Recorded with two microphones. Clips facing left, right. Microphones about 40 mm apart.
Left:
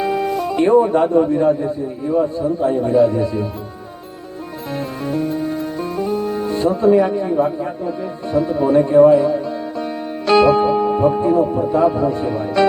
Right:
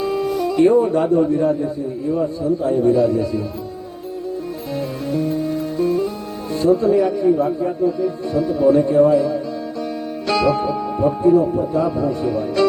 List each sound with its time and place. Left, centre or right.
0.5 s speech: left
6.1 s music: left
7.4 s speech: left